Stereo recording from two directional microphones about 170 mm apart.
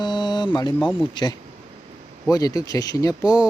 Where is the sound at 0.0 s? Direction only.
25° left (ahead or behind).